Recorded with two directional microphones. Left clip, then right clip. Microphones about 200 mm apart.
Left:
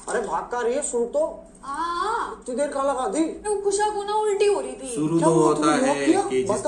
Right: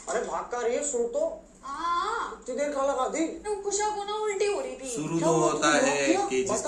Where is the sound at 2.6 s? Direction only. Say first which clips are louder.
Left 3 dB; 45° left (ahead or behind).